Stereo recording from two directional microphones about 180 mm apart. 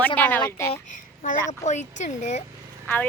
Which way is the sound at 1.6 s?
40° left (ahead or behind).